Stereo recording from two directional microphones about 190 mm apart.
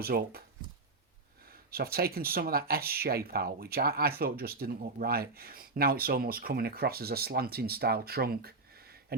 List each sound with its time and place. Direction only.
0.0 s speech: 55° right (ahead or behind)
1.7 s speech: 55° right (ahead or behind)